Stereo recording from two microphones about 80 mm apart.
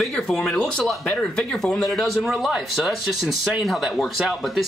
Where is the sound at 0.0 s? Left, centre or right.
Centre.